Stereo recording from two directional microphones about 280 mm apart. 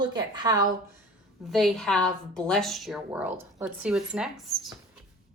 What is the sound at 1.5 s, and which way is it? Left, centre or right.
Speech, centre.